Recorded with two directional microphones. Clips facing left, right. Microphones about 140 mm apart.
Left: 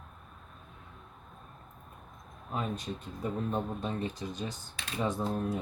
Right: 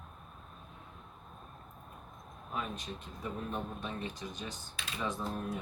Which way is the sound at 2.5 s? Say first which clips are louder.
Left 4 dB; 30° left (ahead or behind).